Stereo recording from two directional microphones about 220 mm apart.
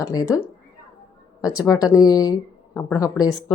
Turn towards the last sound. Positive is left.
turn(degrees=20)  # may be behind; listen again after turning